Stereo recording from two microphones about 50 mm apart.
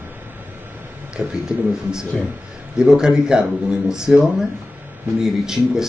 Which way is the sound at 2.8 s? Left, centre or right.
Centre.